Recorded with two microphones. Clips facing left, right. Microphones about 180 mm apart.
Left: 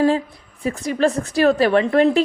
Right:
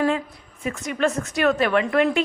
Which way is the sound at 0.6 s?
35° left (ahead or behind).